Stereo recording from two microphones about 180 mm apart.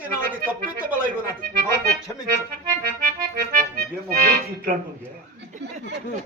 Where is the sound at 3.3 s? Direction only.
55° right (ahead or behind).